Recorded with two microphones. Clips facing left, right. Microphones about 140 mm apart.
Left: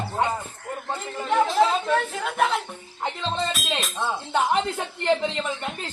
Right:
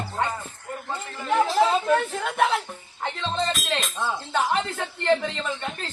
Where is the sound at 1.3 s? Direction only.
Centre (ahead or behind).